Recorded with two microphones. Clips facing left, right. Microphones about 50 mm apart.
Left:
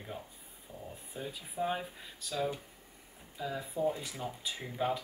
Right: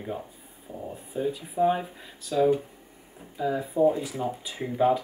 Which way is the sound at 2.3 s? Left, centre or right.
Centre.